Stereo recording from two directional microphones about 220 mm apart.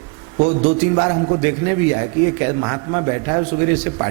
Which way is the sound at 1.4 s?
15° right (ahead or behind).